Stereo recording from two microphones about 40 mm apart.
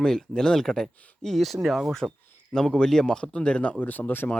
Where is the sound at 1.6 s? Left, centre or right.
Centre.